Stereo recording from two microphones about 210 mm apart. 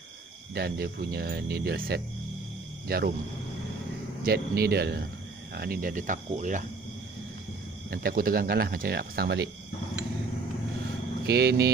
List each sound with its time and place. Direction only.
0.6 s speech: 50° right (ahead or behind)
4.2 s speech: 50° right (ahead or behind)
7.9 s speech: 45° right (ahead or behind)
11.2 s speech: 50° right (ahead or behind)